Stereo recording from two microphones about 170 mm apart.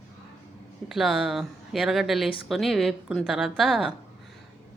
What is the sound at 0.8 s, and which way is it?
Speech, centre (ahead or behind).